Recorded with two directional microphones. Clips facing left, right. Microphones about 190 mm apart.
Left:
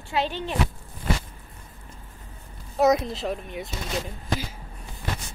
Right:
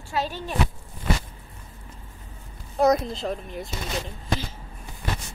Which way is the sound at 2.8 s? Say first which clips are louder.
Even; centre (ahead or behind).